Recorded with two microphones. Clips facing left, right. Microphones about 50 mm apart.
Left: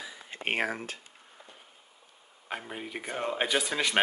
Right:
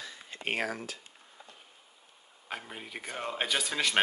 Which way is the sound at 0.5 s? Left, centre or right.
Left.